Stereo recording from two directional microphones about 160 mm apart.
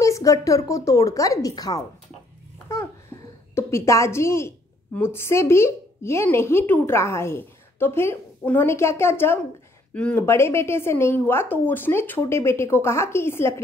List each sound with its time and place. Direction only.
0.0 s a sound: 20° left (ahead or behind)
0.7 s speech: 20° left (ahead or behind)
3.5 s a woman's voice: 20° left (ahead or behind)